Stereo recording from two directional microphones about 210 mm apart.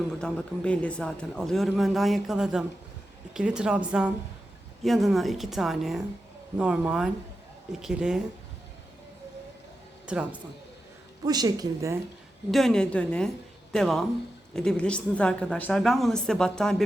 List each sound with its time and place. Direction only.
0.2 s a man's voice: 5° left (ahead or behind)
10.1 s a man's voice: 5° right (ahead or behind)
11.3 s a woman's voice: 20° right (ahead or behind)
12.5 s a man's voice: centre (ahead or behind)